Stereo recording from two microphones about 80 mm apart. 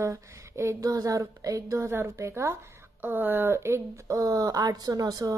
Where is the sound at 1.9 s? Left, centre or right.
Right.